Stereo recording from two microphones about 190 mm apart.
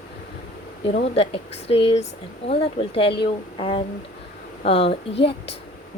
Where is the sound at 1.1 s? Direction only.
30° left (ahead or behind).